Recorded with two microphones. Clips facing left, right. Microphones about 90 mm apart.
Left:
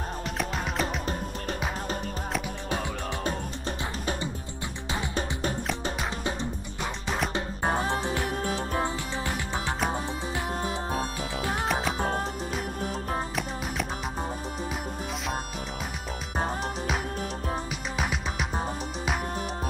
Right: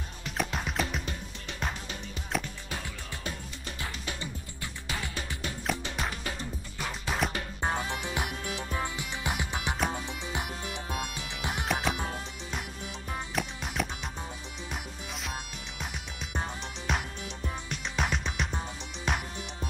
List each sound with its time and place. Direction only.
0.4 s music: centre (ahead or behind)
6.8 s music: centre (ahead or behind)
7.3 s music: 25° left (ahead or behind)
8.4 s music: 45° left (ahead or behind)
9.2 s music: 15° right (ahead or behind)
10.6 s music: 35° left (ahead or behind)
11.6 s music: centre (ahead or behind)
12.0 s music: 45° left (ahead or behind)
17.6 s music: 5° left (ahead or behind)